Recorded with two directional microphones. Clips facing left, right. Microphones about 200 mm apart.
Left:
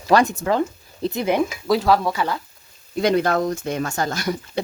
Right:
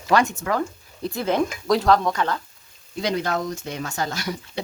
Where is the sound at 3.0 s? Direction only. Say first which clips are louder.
Left 6 dB; 55° left (ahead or behind).